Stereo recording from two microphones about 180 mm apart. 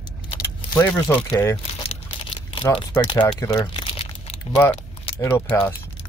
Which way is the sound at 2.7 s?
25° left (ahead or behind).